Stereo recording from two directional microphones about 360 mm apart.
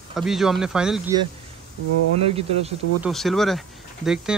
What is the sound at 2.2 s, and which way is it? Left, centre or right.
Speech, centre.